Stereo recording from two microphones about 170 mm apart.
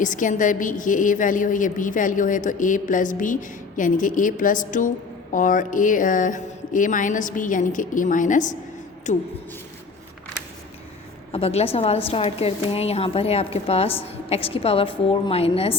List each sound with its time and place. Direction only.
0.0 s a woman's voice: 50° left (ahead or behind)
11.3 s a woman's voice: 35° left (ahead or behind)